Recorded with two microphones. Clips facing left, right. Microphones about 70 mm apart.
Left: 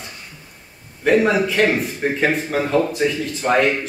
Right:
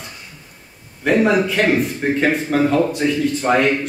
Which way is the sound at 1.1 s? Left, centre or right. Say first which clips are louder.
Even; centre.